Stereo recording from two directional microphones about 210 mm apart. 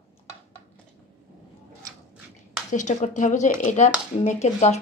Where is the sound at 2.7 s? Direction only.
35° left (ahead or behind).